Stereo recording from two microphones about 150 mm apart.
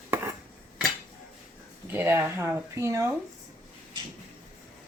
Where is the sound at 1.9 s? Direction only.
15° right (ahead or behind).